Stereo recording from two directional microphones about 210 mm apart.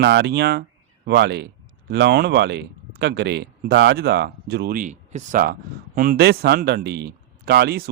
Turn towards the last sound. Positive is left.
turn(degrees=-50)  # may be behind; listen again after turning